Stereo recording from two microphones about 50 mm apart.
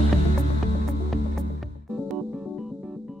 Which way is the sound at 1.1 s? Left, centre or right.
Centre.